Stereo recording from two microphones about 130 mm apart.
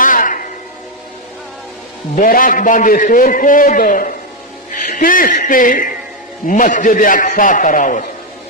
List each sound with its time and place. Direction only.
0.0 s music: 90° left
2.1 s a man's voice: 90° left